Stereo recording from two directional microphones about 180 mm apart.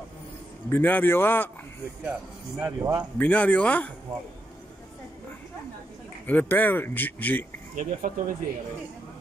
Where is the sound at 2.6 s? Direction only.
10° right (ahead or behind).